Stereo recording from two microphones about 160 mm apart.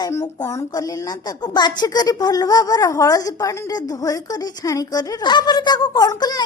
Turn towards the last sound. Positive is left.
turn(degrees=25)  # may be behind; listen again after turning